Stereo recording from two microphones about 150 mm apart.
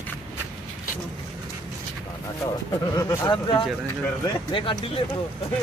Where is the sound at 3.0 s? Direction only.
25° left (ahead or behind).